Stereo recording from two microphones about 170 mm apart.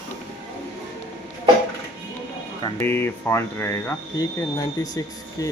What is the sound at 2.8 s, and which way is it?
Speech, 15° left (ahead or behind).